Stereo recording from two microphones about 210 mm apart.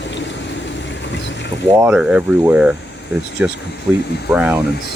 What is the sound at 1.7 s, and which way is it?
Speech, 5° right (ahead or behind).